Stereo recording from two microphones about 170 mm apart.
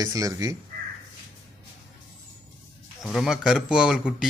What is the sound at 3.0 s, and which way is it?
Speech, centre (ahead or behind).